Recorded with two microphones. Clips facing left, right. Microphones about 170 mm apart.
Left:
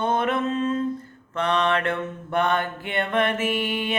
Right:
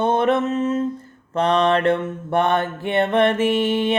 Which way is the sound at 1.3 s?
35° right (ahead or behind).